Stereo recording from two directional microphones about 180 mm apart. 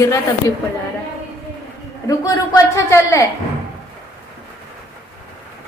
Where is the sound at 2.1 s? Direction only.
20° left (ahead or behind).